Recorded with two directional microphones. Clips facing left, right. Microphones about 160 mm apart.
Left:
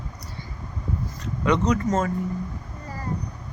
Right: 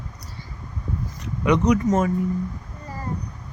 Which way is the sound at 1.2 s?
15° right (ahead or behind).